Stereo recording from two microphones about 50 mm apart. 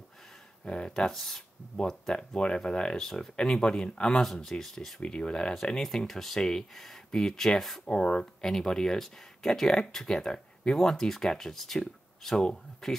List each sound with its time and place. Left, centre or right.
0.7 s speech: centre
5.0 s speech: centre
5.8 s speech: centre
7.8 s speech: centre